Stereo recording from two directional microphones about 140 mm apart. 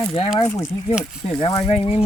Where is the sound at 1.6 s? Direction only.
50° left (ahead or behind).